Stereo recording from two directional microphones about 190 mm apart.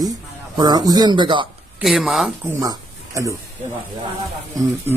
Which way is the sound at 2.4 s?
15° right (ahead or behind).